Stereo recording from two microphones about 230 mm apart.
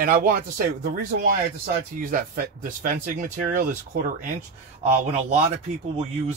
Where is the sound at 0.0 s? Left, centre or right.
Right.